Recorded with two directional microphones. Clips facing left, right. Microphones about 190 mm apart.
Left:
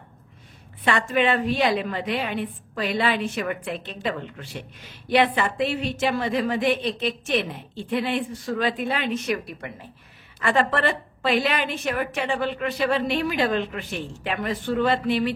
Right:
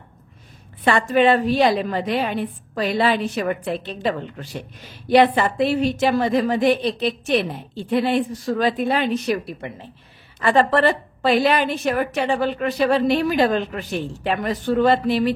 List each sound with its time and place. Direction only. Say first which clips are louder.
0.8 s a woman's voice: right 5 dB; 40° right (ahead or behind)
9.6 s speech: right 4 dB; 25° right (ahead or behind)
10.4 s a woman's voice: right 5 dB; 35° right (ahead or behind)